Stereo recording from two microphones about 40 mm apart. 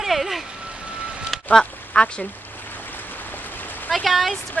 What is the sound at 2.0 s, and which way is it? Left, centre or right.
Speech, left.